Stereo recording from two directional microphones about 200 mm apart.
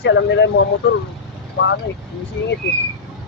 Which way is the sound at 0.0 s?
60° left (ahead or behind).